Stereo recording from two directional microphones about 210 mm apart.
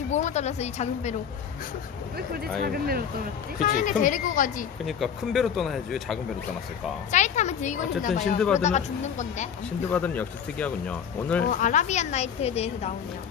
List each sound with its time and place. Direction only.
0.1 s a woman's voice: 35° left (ahead or behind)
2.1 s speech: 45° right (ahead or behind)
3.6 s a woman's voice: 40° left (ahead or behind)
4.9 s speech: centre (ahead or behind)
7.1 s a woman's voice: 35° left (ahead or behind)
9.9 s speech: 10° left (ahead or behind)
11.4 s a woman's voice: 35° left (ahead or behind)